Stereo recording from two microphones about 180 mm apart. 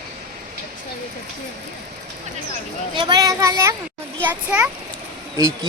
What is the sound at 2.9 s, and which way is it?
A child's voice, 25° right (ahead or behind).